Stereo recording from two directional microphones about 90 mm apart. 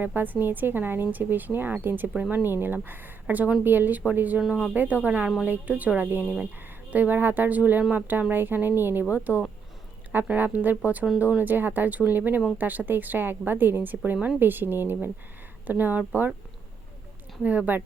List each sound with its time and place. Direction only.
0.0 s a woman's voice: 20° right (ahead or behind)
4.4 s speech: 5° right (ahead or behind)
4.7 s a woman's voice: 20° right (ahead or behind)
17.4 s a woman's voice: 15° right (ahead or behind)